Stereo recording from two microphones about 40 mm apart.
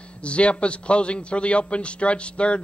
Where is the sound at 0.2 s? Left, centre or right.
Left.